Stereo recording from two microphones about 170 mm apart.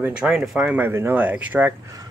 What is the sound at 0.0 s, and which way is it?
Speech, 5° right (ahead or behind).